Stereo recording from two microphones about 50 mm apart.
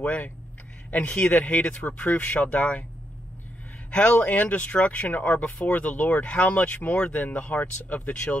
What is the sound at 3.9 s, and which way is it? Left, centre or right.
Speech, left.